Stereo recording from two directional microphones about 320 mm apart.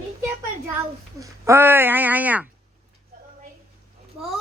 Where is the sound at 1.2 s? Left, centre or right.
Centre.